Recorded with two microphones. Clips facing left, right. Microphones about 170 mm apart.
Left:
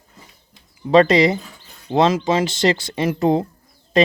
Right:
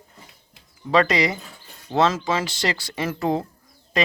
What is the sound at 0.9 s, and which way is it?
Speech, 25° left (ahead or behind).